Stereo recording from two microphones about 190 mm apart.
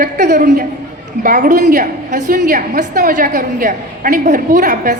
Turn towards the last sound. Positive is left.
turn(degrees=-45)  # may be behind; listen again after turning